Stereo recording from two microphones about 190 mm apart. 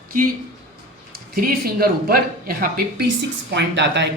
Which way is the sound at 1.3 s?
50° right (ahead or behind).